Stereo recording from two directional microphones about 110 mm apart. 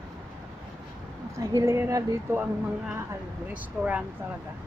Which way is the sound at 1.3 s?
25° right (ahead or behind).